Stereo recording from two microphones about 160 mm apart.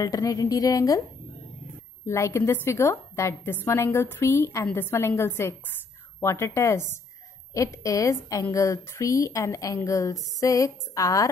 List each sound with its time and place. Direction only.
0.0 s a woman's voice: 20° left (ahead or behind)
2.0 s a woman's voice: 15° left (ahead or behind)